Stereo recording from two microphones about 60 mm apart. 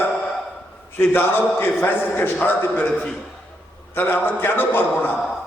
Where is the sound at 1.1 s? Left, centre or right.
Left.